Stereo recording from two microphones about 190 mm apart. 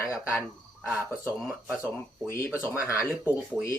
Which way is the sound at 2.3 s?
15° left (ahead or behind).